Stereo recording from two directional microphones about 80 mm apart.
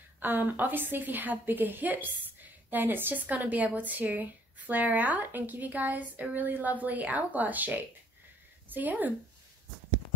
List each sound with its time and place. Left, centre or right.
0.2 s a woman's voice: right